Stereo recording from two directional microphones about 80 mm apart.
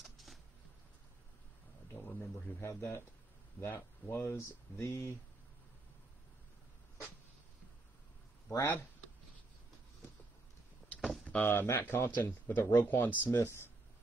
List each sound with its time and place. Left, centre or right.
0.0 s a sound: centre
2.1 s speech: left
8.5 s speech: left
11.3 s speech: left